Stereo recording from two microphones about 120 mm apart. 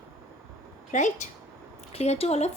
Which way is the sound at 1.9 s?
60° left (ahead or behind).